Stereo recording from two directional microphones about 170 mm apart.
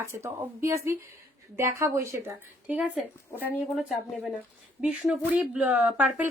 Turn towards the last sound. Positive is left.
turn(degrees=-10)  # may be behind; listen again after turning